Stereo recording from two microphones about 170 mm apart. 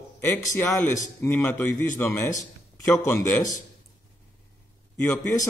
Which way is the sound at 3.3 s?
20° left (ahead or behind).